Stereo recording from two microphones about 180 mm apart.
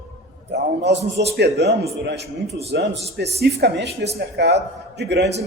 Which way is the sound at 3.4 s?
65° right (ahead or behind).